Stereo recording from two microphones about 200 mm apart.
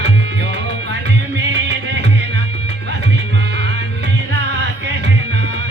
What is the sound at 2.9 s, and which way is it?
Music, 60° right (ahead or behind).